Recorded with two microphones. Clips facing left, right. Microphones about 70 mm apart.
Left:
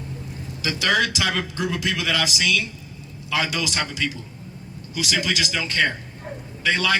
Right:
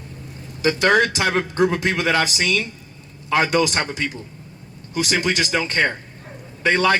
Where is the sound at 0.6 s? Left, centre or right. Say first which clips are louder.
Right 5 dB; right.